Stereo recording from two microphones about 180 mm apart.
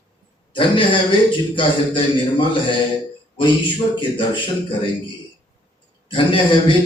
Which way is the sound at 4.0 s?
30° left (ahead or behind).